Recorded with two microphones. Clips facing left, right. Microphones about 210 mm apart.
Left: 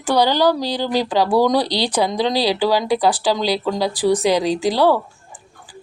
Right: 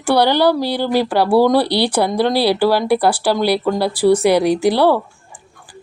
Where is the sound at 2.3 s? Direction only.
15° left (ahead or behind).